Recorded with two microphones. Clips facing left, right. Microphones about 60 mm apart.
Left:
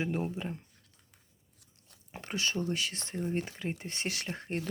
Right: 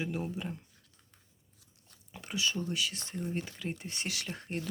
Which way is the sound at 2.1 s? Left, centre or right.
Left.